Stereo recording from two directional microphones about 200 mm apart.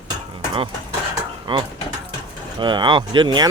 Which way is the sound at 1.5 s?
25° right (ahead or behind).